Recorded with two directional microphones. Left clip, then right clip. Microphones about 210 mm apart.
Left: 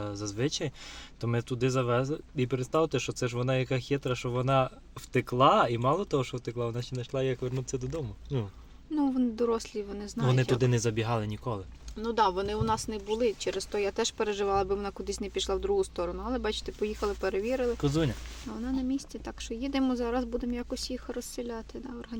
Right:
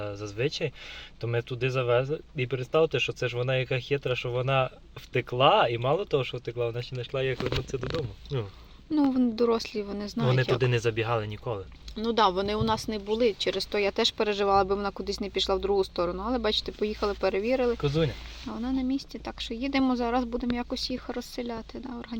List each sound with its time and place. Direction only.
0.0 s speech: 35° left (ahead or behind)
9.0 s speech: 5° right (ahead or behind)
10.6 s speech: 30° left (ahead or behind)
11.9 s speech: 10° right (ahead or behind)
17.7 s speech: 50° left (ahead or behind)
18.4 s speech: 5° right (ahead or behind)